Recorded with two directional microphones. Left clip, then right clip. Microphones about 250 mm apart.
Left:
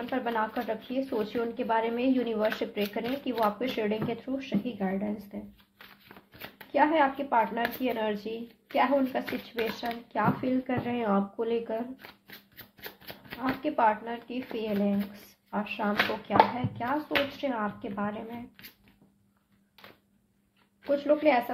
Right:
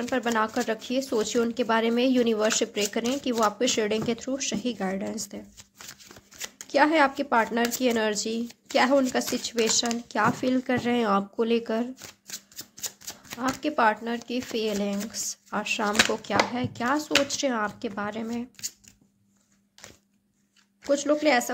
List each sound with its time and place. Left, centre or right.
0.1 s speech: right
6.7 s speech: right
13.4 s speech: right
20.8 s speech: right